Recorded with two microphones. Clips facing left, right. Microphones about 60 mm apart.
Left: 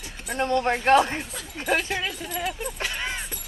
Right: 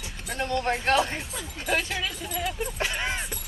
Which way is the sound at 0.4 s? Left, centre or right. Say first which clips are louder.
Left 5 dB; left.